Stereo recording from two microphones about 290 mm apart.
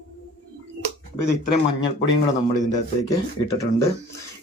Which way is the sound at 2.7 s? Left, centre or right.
Centre.